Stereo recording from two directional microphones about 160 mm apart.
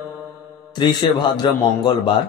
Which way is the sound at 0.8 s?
25° left (ahead or behind).